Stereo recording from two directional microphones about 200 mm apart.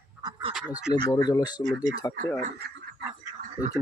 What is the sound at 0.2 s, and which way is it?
Duck, 20° right (ahead or behind).